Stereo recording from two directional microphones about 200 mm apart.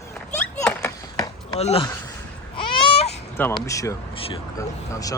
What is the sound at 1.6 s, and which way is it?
Speech, 30° left (ahead or behind).